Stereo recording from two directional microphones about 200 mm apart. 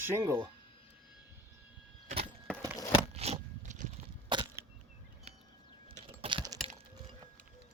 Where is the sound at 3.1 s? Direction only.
30° right (ahead or behind).